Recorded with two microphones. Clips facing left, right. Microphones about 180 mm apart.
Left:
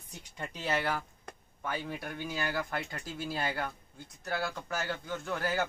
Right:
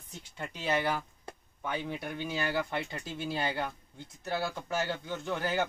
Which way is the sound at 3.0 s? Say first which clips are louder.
Right 1 dB; 25° right (ahead or behind).